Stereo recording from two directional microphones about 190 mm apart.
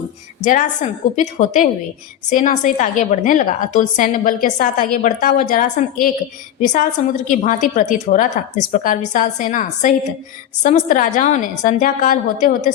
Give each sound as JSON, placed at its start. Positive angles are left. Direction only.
{"t": 0.4, "sound": "a woman's voice", "side_deg": 40}